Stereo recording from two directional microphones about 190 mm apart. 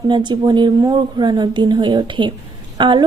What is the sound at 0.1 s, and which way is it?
A woman's voice, 25° right (ahead or behind).